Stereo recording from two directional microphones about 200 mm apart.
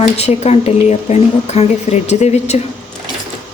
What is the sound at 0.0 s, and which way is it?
A woman's voice, 35° left (ahead or behind).